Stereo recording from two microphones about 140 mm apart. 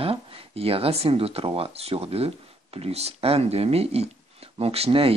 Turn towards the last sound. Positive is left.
turn(degrees=-40)  # may be behind; listen again after turning